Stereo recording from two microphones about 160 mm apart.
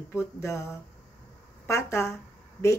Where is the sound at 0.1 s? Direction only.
15° left (ahead or behind).